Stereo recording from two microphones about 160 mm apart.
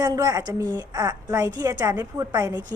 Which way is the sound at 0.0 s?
25° right (ahead or behind).